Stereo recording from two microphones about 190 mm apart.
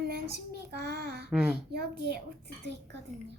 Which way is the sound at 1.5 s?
55° right (ahead or behind).